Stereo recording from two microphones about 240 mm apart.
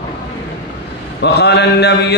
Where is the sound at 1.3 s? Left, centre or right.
Left.